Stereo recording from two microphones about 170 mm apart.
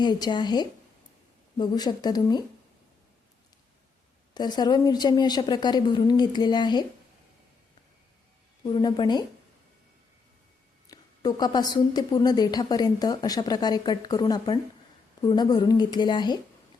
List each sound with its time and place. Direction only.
0.0 s a woman's voice: 25° left (ahead or behind)
4.4 s a woman's voice: 25° left (ahead or behind)
8.7 s a woman's voice: 25° left (ahead or behind)
10.8 s a woman's voice: 20° left (ahead or behind)